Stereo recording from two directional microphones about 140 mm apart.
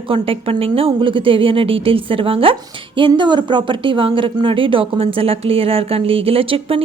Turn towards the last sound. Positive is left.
turn(degrees=-45)  # may be behind; listen again after turning